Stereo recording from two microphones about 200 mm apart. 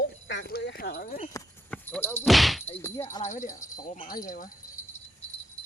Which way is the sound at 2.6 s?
10° left (ahead or behind).